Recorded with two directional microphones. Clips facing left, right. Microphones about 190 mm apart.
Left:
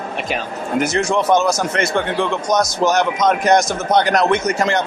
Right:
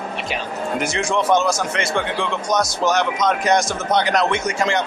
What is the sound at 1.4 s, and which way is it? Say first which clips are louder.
Speech: left 3 dB; 45° left (ahead or behind).